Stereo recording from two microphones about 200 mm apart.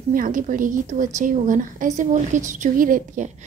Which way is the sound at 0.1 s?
45° right (ahead or behind).